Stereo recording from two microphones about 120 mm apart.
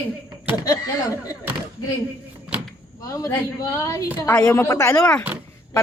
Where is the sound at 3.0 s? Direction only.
30° left (ahead or behind).